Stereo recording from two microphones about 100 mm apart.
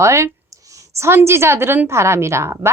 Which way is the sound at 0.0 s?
30° right (ahead or behind).